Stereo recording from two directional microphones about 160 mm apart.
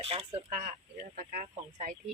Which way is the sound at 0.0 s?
35° right (ahead or behind).